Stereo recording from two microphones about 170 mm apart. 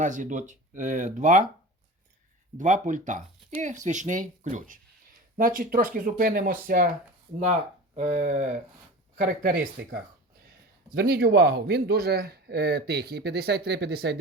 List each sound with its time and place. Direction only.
0.0 s speech: 50° right (ahead or behind)
2.6 s speech: 45° right (ahead or behind)
7.9 s a man's voice: 45° right (ahead or behind); by 14.2 s 75° right (ahead or behind)